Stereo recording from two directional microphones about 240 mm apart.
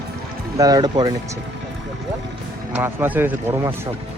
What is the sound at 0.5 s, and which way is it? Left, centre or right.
Speech, centre.